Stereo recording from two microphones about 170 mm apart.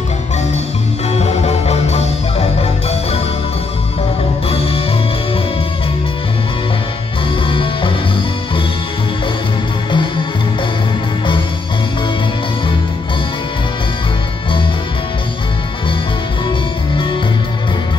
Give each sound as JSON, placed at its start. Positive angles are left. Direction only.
{"t": 1.1, "sound": "music", "side_deg": 40}
{"t": 4.5, "sound": "music", "side_deg": 35}
{"t": 7.4, "sound": "music", "side_deg": 30}
{"t": 9.8, "sound": "music", "side_deg": 30}